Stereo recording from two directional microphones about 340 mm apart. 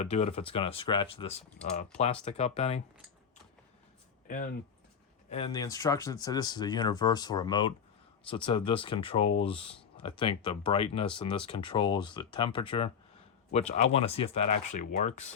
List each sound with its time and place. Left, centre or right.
0.0 s speech: centre
5.3 s speech: centre